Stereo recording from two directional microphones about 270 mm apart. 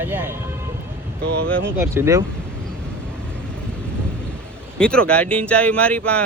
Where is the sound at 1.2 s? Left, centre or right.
Right.